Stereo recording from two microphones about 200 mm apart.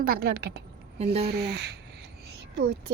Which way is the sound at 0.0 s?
50° right (ahead or behind).